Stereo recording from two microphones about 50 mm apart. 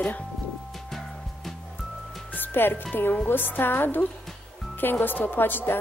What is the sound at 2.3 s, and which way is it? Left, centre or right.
Music, left.